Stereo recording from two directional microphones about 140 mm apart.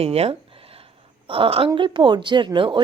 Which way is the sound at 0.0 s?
45° right (ahead or behind).